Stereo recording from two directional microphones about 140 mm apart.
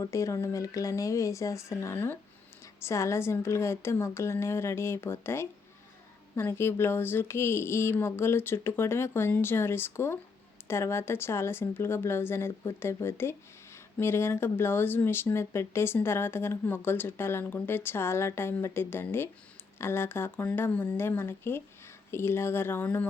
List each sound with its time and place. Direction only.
0.0 s a woman's voice: 20° left (ahead or behind)